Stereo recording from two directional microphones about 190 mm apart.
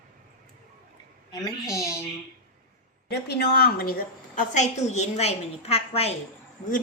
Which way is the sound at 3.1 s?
60° left (ahead or behind).